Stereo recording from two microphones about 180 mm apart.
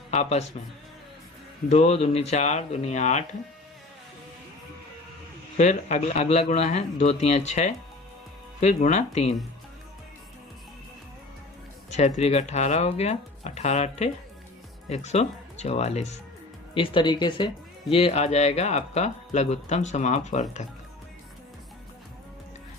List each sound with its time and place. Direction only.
0.1 s speech: 40° left (ahead or behind)
1.7 s speech: 35° left (ahead or behind)
5.5 s speech: 40° left (ahead or behind)
11.9 s speech: 40° left (ahead or behind)
17.9 s speech: 35° left (ahead or behind)